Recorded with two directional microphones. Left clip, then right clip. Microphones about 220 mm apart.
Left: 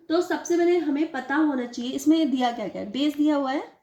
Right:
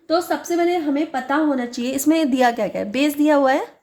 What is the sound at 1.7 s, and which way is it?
A woman's voice, 45° right (ahead or behind).